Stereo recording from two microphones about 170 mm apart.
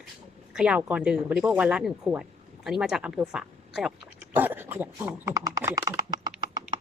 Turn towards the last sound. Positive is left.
turn(degrees=-25)  # may be behind; listen again after turning